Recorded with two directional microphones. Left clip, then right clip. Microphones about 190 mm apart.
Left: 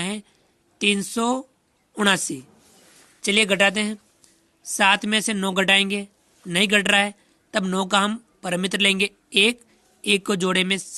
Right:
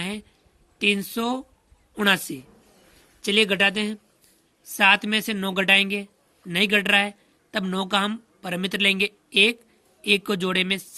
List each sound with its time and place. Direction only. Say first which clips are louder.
0.0 s a woman's voice: left 2 dB; 30° left (ahead or behind)